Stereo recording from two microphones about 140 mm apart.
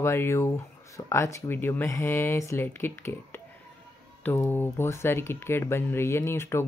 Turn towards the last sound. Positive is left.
turn(degrees=15)  # may be behind; listen again after turning